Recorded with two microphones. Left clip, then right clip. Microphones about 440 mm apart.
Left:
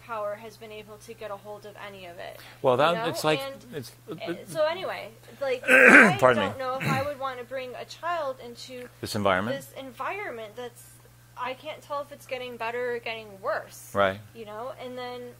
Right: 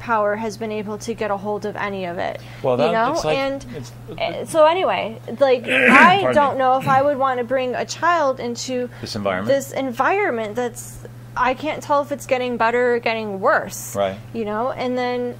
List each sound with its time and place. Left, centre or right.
0.0 s a woman's voice: right
2.6 s speech: left
4.2 s a woman's voice: right
5.7 s speech: left
7.2 s a woman's voice: right
9.0 s speech: left
9.5 s a woman's voice: right
13.9 s speech: left
14.4 s a woman's voice: right